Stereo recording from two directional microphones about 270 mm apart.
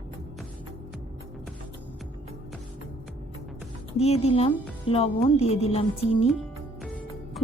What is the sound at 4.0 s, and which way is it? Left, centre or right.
A woman's voice, left.